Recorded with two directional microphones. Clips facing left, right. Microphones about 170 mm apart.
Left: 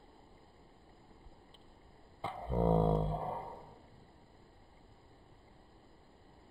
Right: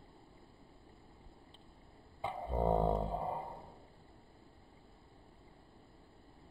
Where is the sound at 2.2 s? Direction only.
10° right (ahead or behind).